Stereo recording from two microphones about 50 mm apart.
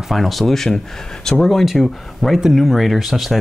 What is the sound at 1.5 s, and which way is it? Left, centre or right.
Speech, centre.